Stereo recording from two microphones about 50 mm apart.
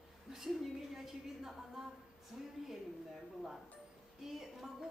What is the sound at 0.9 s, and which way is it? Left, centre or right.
A woman's voice, centre.